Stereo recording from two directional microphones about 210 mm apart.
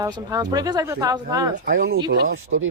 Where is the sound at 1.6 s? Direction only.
45° right (ahead or behind).